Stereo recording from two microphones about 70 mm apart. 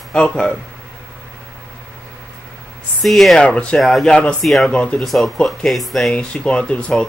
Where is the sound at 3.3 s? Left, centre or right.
Centre.